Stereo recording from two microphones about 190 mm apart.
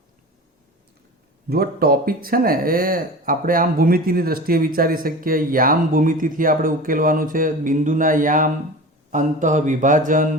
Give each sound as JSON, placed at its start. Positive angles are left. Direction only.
{"t": 1.5, "sound": "speech", "side_deg": -55}